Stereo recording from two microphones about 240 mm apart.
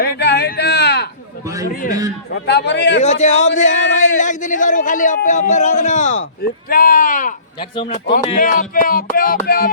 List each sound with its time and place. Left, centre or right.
0.0 s a sound: left
2.3 s a man's voice: left
3.0 s speech: left
7.6 s speech: left